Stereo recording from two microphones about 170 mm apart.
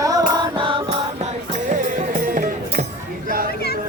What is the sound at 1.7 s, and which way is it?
Music, 50° right (ahead or behind).